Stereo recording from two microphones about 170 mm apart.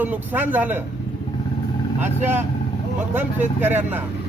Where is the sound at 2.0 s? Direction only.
10° right (ahead or behind).